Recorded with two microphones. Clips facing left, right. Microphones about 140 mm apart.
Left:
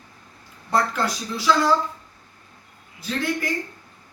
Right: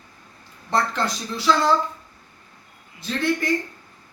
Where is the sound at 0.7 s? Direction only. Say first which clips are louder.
Left 1 dB; 10° left (ahead or behind).